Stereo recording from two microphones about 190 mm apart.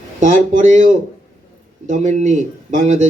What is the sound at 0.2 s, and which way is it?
A man's voice, 40° right (ahead or behind).